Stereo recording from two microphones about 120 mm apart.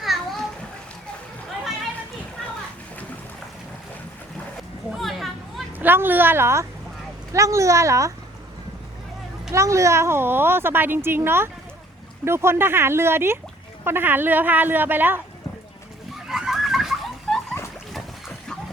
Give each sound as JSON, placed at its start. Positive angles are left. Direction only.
{"t": 0.0, "sound": "splash", "side_deg": 0}
{"t": 4.9, "sound": "a sound", "side_deg": 0}
{"t": 5.8, "sound": "speech", "side_deg": -15}
{"t": 9.5, "sound": "speech", "side_deg": -25}
{"t": 16.1, "sound": "a sound", "side_deg": -5}
{"t": 17.3, "sound": "splash", "side_deg": 0}